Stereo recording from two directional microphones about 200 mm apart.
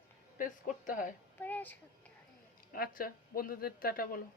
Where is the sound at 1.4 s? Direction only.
10° left (ahead or behind).